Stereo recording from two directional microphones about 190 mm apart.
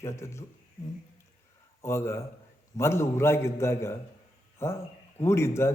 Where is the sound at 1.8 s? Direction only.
15° left (ahead or behind).